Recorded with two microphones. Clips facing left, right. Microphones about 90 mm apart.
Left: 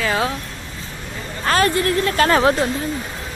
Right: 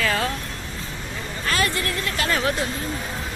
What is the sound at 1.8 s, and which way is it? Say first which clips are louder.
Speech: left 8 dB; 30° left (ahead or behind).